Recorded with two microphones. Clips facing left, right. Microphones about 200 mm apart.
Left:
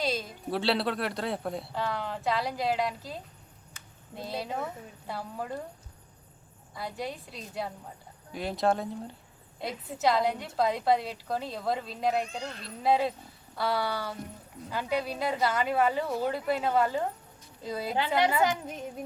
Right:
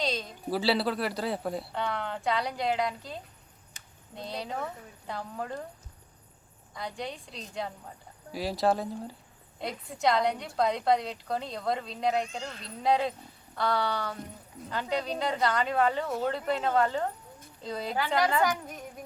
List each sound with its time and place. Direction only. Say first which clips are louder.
0.0 s a woman's voice: left 1 dB; 5° left (ahead or behind)
6.7 s a woman's voice: left 1 dB; 5° left (ahead or behind)
18.4 s female singing: left 1 dB; 25° left (ahead or behind)